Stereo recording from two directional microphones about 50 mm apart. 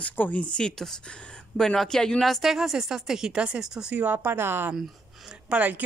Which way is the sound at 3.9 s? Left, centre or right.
Right.